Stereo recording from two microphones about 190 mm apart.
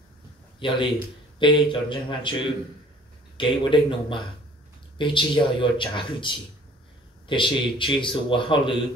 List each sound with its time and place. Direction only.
0.6 s speech: 25° left (ahead or behind)
3.3 s speech: 25° left (ahead or behind)